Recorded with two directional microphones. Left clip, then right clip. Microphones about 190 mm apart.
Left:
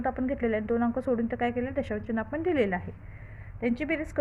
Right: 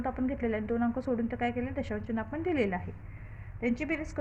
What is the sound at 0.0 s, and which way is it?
A woman's voice, 35° left (ahead or behind).